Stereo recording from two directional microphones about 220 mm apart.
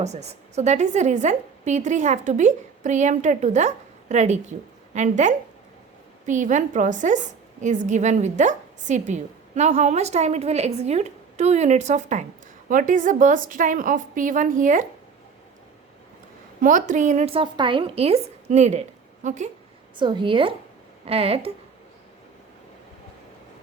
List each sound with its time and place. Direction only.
0.0 s a woman's voice: 30° right (ahead or behind)
16.6 s a woman's voice: 35° right (ahead or behind)
20.0 s a woman's voice: 20° right (ahead or behind)